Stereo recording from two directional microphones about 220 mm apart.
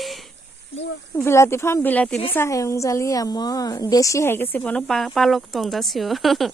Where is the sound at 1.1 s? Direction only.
10° left (ahead or behind).